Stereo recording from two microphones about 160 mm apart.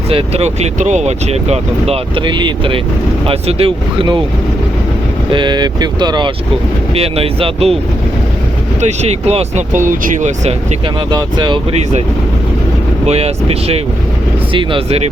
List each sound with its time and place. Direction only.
0.1 s speech: 40° right (ahead or behind)
5.3 s speech: 30° right (ahead or behind)
8.8 s speech: 45° right (ahead or behind)
11.1 s speech: 25° right (ahead or behind)
13.1 s speech: 40° right (ahead or behind)